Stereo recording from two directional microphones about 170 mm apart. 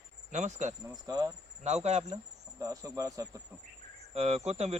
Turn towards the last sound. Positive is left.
turn(degrees=-40)  # may be behind; listen again after turning